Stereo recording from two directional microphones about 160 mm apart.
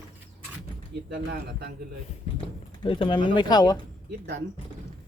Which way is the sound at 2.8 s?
30° left (ahead or behind).